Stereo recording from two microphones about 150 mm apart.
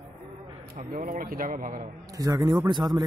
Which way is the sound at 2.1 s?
25° right (ahead or behind).